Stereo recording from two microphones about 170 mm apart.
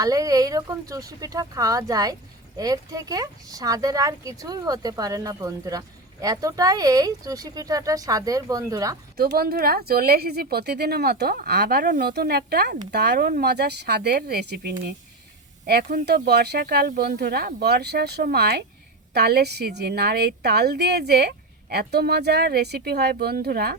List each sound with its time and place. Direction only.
0.0 s speech: 20° right (ahead or behind)
9.1 s a woman's voice: 65° right (ahead or behind)